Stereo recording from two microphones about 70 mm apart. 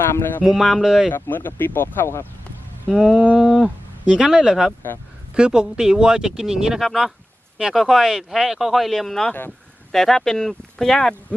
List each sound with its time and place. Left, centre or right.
0.0 s speech: left
0.4 s speech: centre
1.1 s speech: left
2.9 s speech: centre
3.3 s a sound: centre
4.0 s speech: centre
11.3 s speech: centre